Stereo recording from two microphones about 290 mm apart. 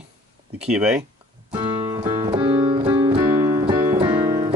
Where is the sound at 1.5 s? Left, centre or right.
Centre.